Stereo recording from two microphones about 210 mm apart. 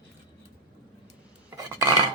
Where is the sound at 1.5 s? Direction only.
15° right (ahead or behind).